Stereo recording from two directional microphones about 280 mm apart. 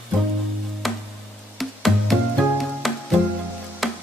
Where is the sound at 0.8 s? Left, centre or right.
Centre.